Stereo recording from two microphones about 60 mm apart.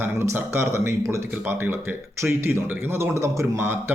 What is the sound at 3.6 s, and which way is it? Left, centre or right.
Speech, right.